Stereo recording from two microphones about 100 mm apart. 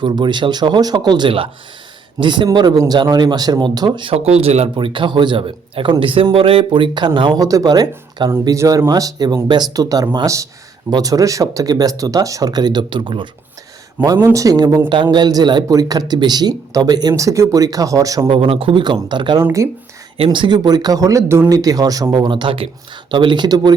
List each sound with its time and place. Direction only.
0.0 s speech: 50° right (ahead or behind)
4.1 s speech: 85° right
4.7 s speech: 55° right (ahead or behind)
7.3 s speech: 35° right (ahead or behind); by 13.2 s 55° right (ahead or behind)
14.0 s speech: 40° right (ahead or behind)
14.8 s speech: 50° right (ahead or behind); by 18.3 s 35° right (ahead or behind)
18.3 s speech: 70° right (ahead or behind); by 19.4 s 50° right (ahead or behind)
19.4 s speech: 30° right (ahead or behind)
20.1 s speech: 60° right (ahead or behind); by 21.4 s 30° right (ahead or behind)
21.5 s speech: 40° right (ahead or behind); by 22.7 s 65° right (ahead or behind)
23.1 s speech: 50° right (ahead or behind)